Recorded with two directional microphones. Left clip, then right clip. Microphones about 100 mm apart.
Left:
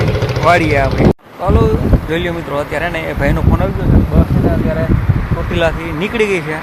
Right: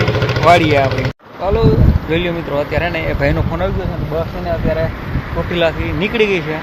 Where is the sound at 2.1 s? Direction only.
10° left (ahead or behind).